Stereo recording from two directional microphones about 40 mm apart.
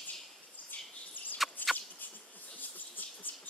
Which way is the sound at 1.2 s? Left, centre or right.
Left.